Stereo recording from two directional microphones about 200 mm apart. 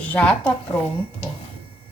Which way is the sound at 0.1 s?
5° left (ahead or behind).